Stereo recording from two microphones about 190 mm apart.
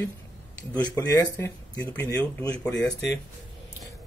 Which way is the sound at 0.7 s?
10° left (ahead or behind).